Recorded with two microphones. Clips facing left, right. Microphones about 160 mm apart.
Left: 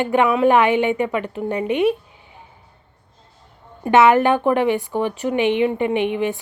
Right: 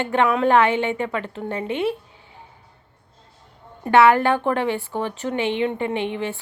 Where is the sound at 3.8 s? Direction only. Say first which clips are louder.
Left 2 dB; 20° left (ahead or behind).